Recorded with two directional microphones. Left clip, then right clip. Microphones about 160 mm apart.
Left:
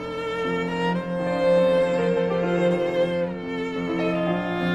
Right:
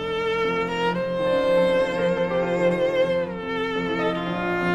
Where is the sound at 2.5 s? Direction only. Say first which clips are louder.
Right 1 dB; 40° right (ahead or behind).